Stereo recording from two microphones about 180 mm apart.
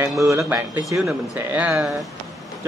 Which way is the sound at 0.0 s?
15° right (ahead or behind).